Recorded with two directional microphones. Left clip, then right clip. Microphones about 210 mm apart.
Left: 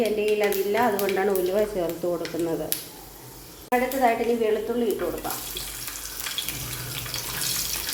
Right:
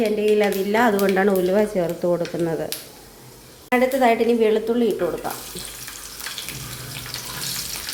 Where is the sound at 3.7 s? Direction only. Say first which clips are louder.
Right 4 dB; 40° right (ahead or behind).